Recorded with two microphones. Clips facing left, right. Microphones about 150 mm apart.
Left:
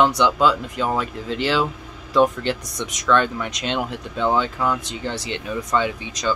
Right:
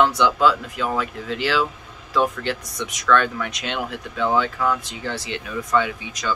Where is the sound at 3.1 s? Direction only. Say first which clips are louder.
Even; 20° left (ahead or behind).